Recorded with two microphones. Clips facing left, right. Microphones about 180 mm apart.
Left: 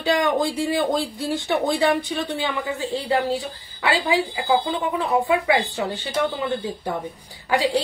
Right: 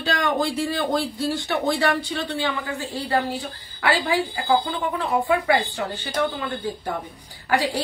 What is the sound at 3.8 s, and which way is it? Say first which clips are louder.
Speech: left 1 dB; 20° left (ahead or behind).